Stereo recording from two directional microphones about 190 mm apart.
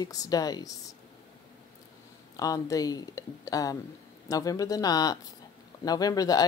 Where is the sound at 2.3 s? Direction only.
20° left (ahead or behind).